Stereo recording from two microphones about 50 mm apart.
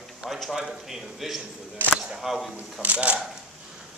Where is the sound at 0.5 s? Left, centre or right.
Centre.